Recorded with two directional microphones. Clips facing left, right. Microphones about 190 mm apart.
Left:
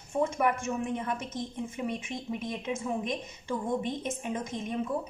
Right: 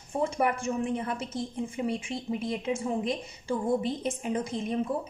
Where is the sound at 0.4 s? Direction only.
30° right (ahead or behind).